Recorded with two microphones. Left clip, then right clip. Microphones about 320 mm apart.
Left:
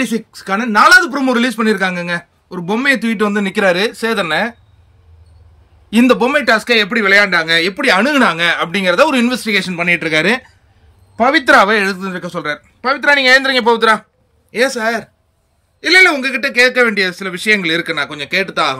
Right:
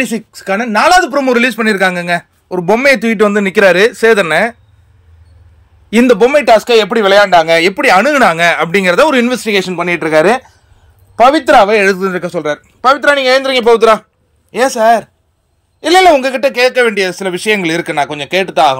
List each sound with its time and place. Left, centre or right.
0.0 s a man's voice: centre
5.9 s a man's voice: centre
6.7 s speech: right
7.4 s a man's voice: centre
9.8 s speech: centre
11.9 s a man's voice: centre
12.8 s speech: centre
14.5 s a man's voice: centre